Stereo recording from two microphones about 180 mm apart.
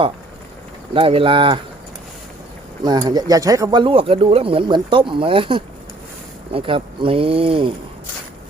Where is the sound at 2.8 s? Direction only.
25° right (ahead or behind).